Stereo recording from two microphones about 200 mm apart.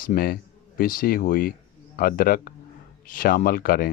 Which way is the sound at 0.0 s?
45° left (ahead or behind).